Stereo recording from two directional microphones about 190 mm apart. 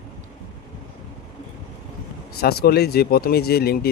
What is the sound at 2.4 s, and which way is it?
Speech, 55° left (ahead or behind).